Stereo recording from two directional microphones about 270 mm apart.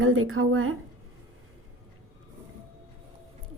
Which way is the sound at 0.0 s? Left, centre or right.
Right.